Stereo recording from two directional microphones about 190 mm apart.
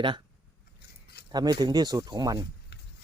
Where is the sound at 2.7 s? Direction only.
60° left (ahead or behind).